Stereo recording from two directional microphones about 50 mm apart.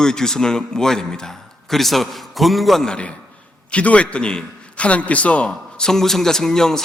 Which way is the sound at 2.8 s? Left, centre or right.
Left.